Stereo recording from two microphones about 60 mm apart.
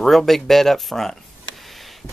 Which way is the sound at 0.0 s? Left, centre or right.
Centre.